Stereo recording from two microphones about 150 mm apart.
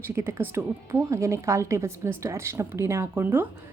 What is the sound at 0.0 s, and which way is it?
A woman's voice, 15° right (ahead or behind).